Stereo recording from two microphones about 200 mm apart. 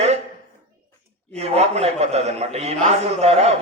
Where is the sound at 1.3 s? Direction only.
30° right (ahead or behind).